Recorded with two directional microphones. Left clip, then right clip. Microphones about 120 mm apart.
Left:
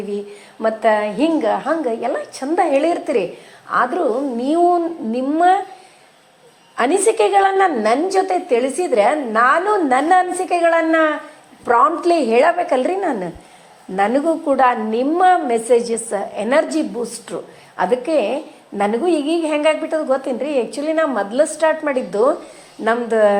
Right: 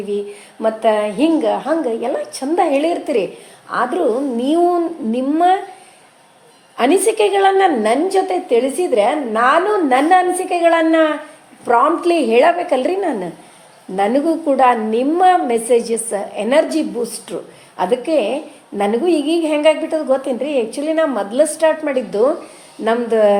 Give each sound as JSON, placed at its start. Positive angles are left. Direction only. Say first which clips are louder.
{"t": 0.6, "sound": "a woman's voice", "louder": "right 1 dB", "side_deg": 0}
{"t": 6.7, "sound": "a woman's voice", "louder": "right 1 dB", "side_deg": 15}